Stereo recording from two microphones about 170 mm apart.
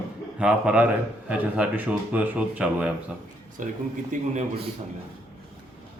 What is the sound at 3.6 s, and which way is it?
Speech, 50° right (ahead or behind).